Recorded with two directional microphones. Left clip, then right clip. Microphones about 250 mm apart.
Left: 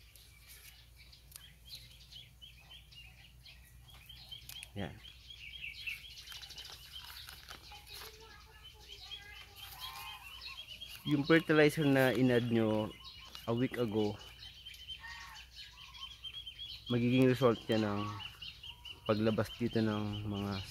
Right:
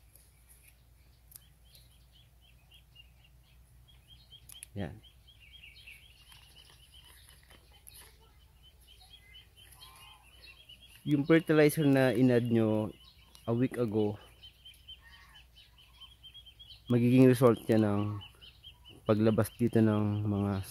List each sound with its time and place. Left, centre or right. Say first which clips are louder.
4.6 s a sound: right 3 dB; right
11.1 s speech: right 3 dB; right
16.8 s speech: right 6 dB; right
19.0 s speech: right 5 dB; right